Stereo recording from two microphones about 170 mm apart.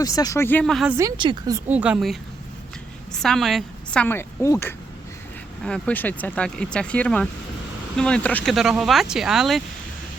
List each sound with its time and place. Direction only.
0.0 s a woman's voice: 20° left (ahead or behind); by 0.9 s centre (ahead or behind)
0.9 s speech: 15° right (ahead or behind)
1.1 s a woman's voice: 30° right (ahead or behind)
1.5 s a woman's voice: 10° right (ahead or behind); by 8.5 s 10° left (ahead or behind)
8.5 s speech: centre (ahead or behind)